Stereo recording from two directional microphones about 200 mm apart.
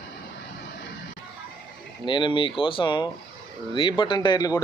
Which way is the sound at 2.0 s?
25° left (ahead or behind).